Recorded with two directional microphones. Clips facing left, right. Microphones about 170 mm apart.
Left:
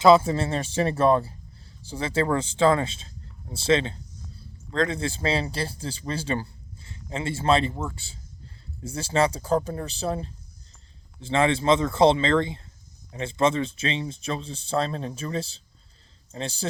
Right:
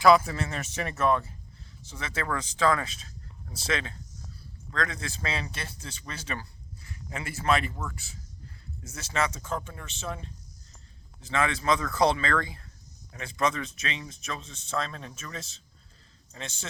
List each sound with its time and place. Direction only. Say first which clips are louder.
0.0 s speech: left 4 dB; 25° left (ahead or behind)